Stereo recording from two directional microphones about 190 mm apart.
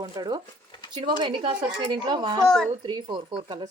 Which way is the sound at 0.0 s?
20° right (ahead or behind).